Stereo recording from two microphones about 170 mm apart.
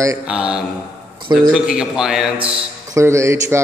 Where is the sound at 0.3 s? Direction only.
5° right (ahead or behind).